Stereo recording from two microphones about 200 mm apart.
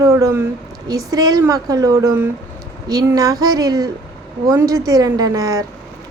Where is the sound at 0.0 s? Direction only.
15° right (ahead or behind).